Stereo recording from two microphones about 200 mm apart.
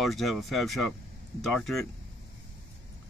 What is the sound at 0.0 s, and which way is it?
Speech, centre (ahead or behind).